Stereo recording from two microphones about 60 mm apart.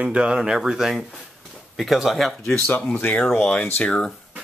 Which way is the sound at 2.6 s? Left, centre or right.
Left.